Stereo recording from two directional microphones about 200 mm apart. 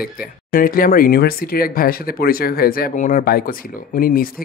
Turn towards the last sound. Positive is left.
turn(degrees=45)  # may be behind; listen again after turning